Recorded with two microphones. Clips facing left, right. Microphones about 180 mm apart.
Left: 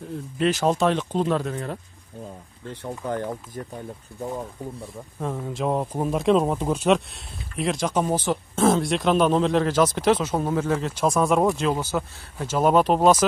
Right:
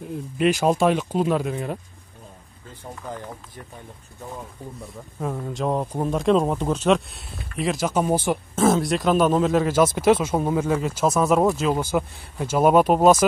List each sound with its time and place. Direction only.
0.4 s speech: 10° right (ahead or behind)
2.6 s speech: 80° left
3.6 s speech: 45° left (ahead or behind)
5.2 s speech: centre (ahead or behind)